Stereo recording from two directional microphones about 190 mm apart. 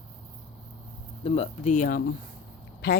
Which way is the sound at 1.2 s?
35° left (ahead or behind).